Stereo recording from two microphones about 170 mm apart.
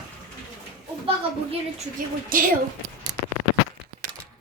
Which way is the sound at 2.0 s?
55° right (ahead or behind).